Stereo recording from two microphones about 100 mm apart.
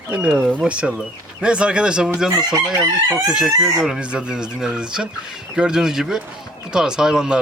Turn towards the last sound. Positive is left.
turn(degrees=-5)  # may be behind; listen again after turning